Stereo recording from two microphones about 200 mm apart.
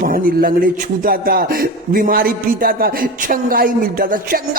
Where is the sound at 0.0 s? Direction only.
45° right (ahead or behind).